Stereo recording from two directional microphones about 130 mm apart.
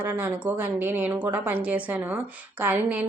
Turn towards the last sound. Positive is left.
turn(degrees=-15)  # may be behind; listen again after turning